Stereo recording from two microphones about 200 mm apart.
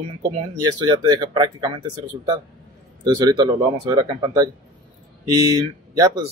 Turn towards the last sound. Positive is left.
turn(degrees=-20)  # may be behind; listen again after turning